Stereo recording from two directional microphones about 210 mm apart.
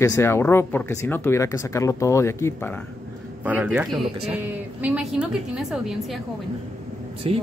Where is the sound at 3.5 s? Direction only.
10° right (ahead or behind).